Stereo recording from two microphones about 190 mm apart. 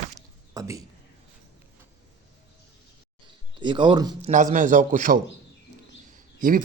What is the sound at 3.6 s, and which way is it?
Speech, 25° right (ahead or behind).